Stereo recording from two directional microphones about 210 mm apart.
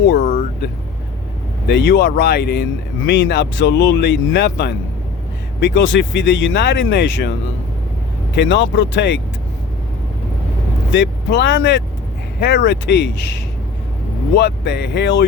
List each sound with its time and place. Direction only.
0.1 s speech: 45° left (ahead or behind)
1.6 s speech: 55° left (ahead or behind)
8.4 s speech: 55° left (ahead or behind)
10.9 s speech: 55° left (ahead or behind)